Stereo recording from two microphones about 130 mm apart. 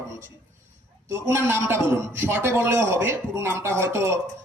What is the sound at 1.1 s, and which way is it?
A man's voice, 20° right (ahead or behind).